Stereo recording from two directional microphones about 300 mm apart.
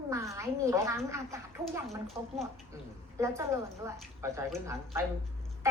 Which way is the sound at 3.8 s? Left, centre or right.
Centre.